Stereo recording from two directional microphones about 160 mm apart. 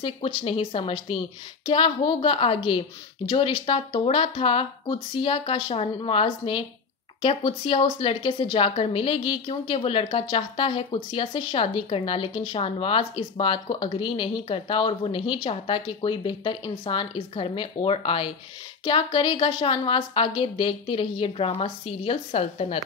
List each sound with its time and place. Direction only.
0.0 s a woman's voice: 35° left (ahead or behind)